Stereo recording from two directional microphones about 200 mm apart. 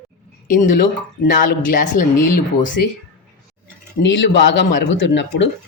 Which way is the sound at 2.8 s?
50° left (ahead or behind).